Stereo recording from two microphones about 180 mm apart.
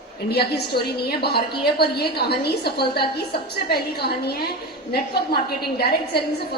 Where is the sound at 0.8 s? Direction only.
60° left (ahead or behind).